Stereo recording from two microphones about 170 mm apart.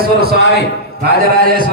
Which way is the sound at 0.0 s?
65° right (ahead or behind).